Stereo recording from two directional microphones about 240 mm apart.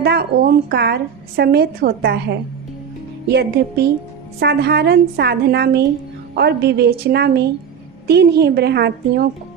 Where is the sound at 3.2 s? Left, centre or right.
Right.